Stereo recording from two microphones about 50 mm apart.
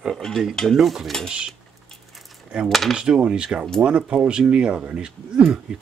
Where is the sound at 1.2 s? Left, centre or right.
Centre.